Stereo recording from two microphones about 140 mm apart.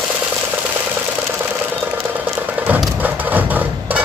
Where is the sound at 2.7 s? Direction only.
10° right (ahead or behind).